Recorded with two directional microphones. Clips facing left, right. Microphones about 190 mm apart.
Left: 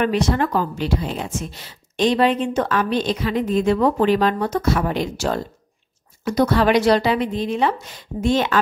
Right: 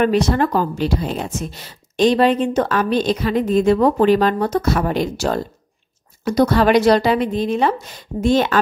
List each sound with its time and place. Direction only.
0.0 s a woman's voice: 40° right (ahead or behind)